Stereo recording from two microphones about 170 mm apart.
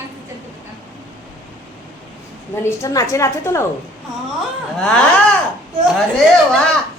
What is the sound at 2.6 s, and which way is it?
Speech, 20° left (ahead or behind).